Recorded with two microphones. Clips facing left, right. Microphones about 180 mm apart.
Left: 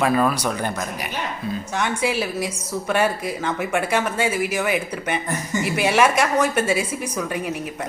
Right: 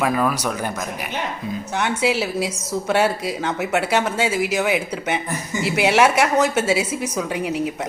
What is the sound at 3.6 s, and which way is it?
Speech, 75° right (ahead or behind).